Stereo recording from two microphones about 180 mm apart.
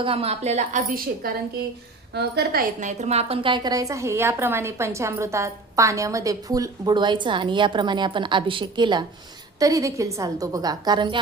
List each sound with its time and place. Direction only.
0.0 s a woman's voice: 30° right (ahead or behind)
1.2 s a woman's voice: 55° right (ahead or behind)
2.8 s a woman's voice: 40° right (ahead or behind)